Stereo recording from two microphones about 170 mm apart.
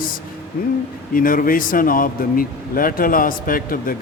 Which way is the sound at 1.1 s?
55° left (ahead or behind).